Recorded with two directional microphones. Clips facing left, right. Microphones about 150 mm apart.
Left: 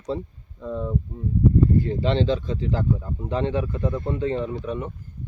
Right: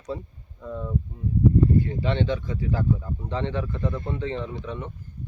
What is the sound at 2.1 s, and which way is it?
Speech, 30° left (ahead or behind).